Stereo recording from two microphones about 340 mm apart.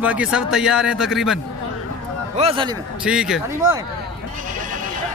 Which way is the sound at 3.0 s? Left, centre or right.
Centre.